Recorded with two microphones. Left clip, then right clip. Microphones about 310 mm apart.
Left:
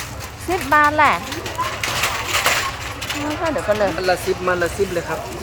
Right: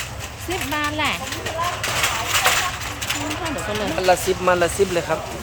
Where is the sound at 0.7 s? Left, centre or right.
Centre.